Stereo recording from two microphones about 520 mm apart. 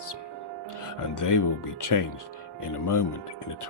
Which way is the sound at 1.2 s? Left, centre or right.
Left.